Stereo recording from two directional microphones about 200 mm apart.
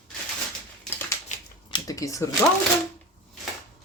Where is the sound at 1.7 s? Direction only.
15° left (ahead or behind).